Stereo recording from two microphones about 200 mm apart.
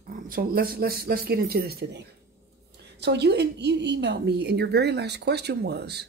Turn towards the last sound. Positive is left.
turn(degrees=-55)  # may be behind; listen again after turning